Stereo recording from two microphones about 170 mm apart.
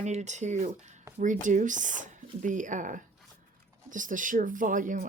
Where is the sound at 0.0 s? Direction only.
45° right (ahead or behind).